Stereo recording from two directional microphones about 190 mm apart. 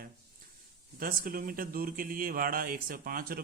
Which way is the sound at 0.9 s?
50° right (ahead or behind).